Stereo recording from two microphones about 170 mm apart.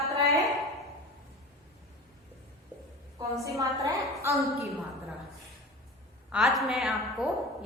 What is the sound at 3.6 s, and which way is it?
Speech, 20° right (ahead or behind).